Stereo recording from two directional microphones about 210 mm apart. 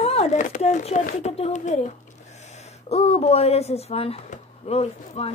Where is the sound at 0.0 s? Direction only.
30° left (ahead or behind).